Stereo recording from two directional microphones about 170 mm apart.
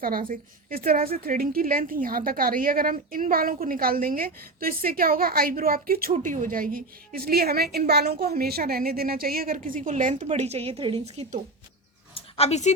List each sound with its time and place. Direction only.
0.0 s a woman's voice: 55° right (ahead or behind)
6.1 s a woman's voice: 50° right (ahead or behind)
12.1 s a sound: 40° left (ahead or behind)